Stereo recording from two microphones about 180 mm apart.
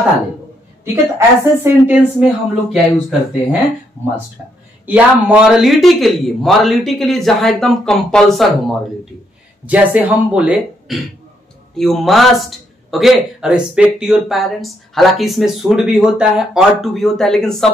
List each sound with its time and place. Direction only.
1.1 s speech: 10° right (ahead or behind)
4.8 s a man's voice: 5° right (ahead or behind)
9.7 s a man's voice: 10° right (ahead or behind)